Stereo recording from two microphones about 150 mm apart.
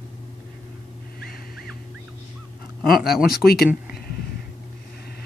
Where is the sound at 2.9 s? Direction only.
90° left.